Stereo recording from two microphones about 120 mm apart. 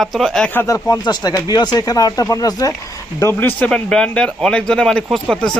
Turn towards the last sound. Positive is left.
turn(degrees=5)  # may be behind; listen again after turning